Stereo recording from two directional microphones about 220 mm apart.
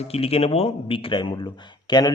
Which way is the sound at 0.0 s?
25° left (ahead or behind).